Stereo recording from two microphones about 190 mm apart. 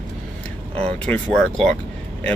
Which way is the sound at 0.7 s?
5° left (ahead or behind).